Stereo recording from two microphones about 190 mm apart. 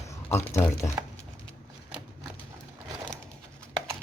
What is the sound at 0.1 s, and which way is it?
Speech, 15° left (ahead or behind).